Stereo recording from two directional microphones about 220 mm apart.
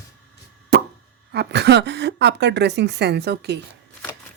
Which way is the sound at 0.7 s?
45° right (ahead or behind).